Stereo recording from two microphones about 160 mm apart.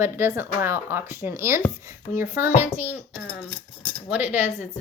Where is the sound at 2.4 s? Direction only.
45° left (ahead or behind).